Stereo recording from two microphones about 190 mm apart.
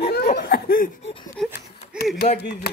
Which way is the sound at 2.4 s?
60° left (ahead or behind).